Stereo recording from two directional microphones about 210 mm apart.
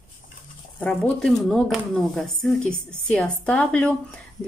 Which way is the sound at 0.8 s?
5° left (ahead or behind).